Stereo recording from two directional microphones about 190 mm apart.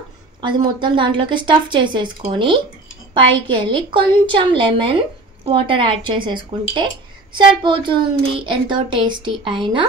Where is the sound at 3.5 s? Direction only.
25° right (ahead or behind).